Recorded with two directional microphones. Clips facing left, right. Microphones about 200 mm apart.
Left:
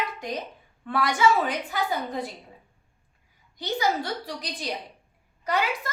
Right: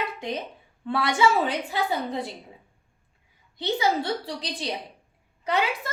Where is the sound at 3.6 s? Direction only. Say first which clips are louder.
Right 2 dB; 25° right (ahead or behind).